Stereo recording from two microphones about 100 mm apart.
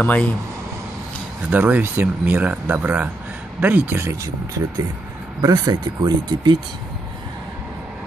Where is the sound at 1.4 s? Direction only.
15° right (ahead or behind).